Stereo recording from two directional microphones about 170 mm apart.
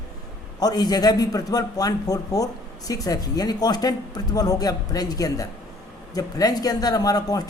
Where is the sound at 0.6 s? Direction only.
25° left (ahead or behind).